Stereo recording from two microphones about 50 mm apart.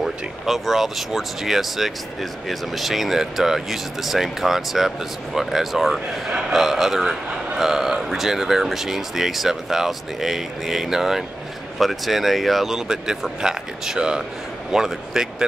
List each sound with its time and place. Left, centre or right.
0.0 s speech: centre